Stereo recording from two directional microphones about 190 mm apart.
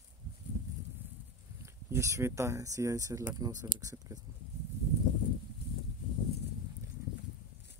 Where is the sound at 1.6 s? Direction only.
15° right (ahead or behind).